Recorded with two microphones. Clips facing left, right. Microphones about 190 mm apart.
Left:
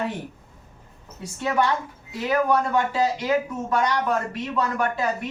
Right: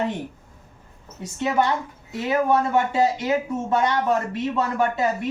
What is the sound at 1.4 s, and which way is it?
Speech, 20° right (ahead or behind).